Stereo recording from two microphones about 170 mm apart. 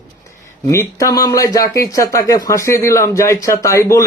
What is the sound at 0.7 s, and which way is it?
A man's voice, 20° left (ahead or behind).